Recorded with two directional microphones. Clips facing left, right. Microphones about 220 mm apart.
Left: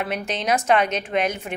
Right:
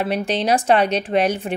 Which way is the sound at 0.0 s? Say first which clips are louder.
Right 5 dB; 30° right (ahead or behind).